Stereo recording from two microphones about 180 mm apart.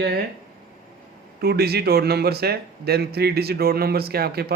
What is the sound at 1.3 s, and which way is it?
Speech, 60° right (ahead or behind).